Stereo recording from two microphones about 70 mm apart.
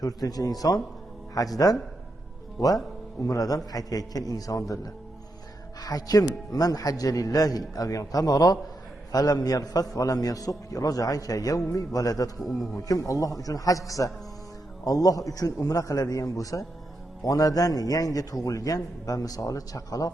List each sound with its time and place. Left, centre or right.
0.0 s a man's voice: left
5.8 s a man's voice: left